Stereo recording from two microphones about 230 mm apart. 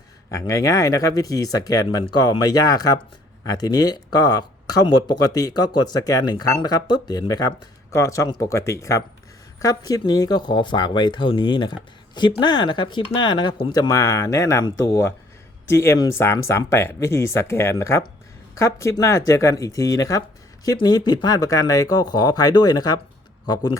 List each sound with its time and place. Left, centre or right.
0.3 s speech: centre